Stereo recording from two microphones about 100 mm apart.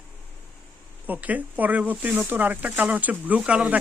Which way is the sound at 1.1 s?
15° right (ahead or behind).